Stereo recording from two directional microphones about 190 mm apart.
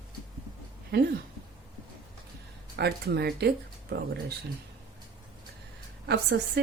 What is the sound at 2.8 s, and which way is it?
Speech, 60° right (ahead or behind).